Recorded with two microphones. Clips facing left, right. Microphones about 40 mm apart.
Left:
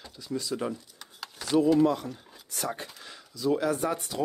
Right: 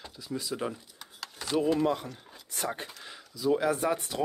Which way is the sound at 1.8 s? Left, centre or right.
Centre.